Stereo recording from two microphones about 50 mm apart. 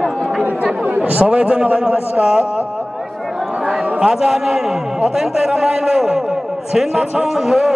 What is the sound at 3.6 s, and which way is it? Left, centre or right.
A man's voice, centre.